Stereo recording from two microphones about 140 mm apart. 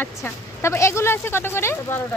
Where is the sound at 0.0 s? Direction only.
20° left (ahead or behind).